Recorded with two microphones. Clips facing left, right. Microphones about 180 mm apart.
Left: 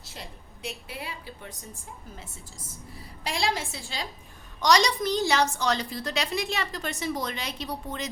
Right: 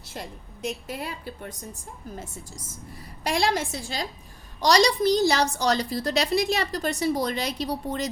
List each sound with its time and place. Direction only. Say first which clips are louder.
0.0 s a woman's voice: right 6 dB; 50° right (ahead or behind)
3.2 s a woman's voice: right 5 dB; 50° right (ahead or behind)